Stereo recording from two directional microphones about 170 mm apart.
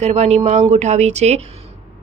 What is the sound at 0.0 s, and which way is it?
Speech, 40° right (ahead or behind).